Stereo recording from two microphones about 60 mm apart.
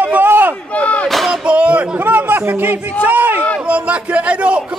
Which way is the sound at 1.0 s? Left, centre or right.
Centre.